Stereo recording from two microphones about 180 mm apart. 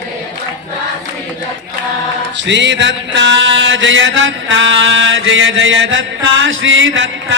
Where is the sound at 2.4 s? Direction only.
80° right.